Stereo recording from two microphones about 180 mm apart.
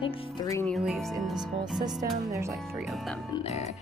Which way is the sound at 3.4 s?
35° left (ahead or behind).